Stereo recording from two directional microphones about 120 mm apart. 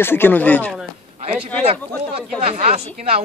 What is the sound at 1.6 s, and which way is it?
Speech, 55° right (ahead or behind).